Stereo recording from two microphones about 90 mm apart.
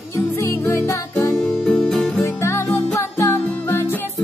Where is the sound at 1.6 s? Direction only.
5° left (ahead or behind).